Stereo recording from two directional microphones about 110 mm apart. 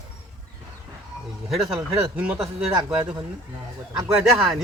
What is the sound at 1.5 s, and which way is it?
Speech, 5° right (ahead or behind).